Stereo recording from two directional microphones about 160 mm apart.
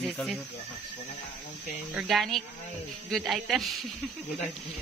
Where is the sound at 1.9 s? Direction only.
Centre (ahead or behind).